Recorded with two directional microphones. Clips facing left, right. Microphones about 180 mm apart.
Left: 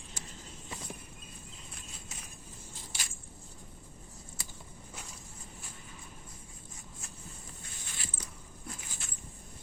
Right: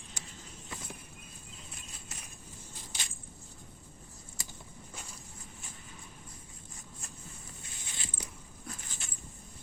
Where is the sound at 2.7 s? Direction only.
15° right (ahead or behind).